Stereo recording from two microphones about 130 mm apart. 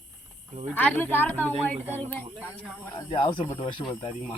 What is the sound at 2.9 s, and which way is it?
Speech, 40° left (ahead or behind).